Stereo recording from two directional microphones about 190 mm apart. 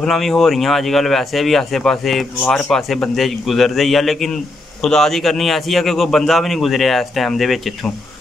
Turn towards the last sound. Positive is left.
turn(degrees=0)  # may be behind; listen again after turning